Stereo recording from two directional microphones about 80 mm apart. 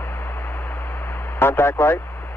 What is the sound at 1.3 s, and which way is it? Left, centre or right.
Speech, left.